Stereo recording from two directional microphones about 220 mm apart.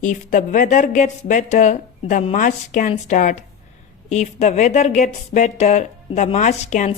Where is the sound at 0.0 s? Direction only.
35° left (ahead or behind).